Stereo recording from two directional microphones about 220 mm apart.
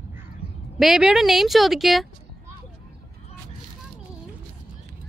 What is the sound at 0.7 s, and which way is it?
Speech, centre (ahead or behind).